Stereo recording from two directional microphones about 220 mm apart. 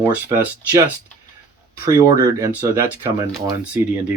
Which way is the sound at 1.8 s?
15° right (ahead or behind).